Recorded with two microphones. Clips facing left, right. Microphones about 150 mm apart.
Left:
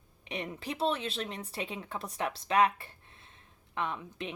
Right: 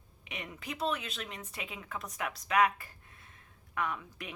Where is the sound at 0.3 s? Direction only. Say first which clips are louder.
Left 5 dB; 30° left (ahead or behind).